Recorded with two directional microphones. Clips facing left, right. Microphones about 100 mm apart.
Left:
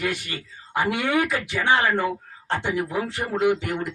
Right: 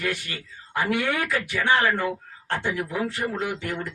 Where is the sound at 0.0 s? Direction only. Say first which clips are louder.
Left 2 dB; 20° left (ahead or behind).